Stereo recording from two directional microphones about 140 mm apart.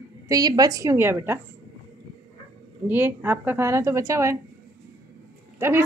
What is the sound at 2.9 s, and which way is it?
A woman's voice, 15° right (ahead or behind).